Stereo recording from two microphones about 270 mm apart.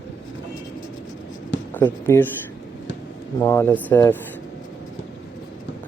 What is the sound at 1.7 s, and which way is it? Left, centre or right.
Speech, centre.